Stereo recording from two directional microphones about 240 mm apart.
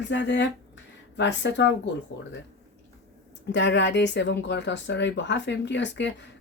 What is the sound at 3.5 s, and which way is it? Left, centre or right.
Speech, left.